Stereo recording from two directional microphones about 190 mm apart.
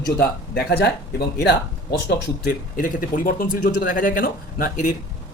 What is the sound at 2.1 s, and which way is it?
Speech, 50° left (ahead or behind).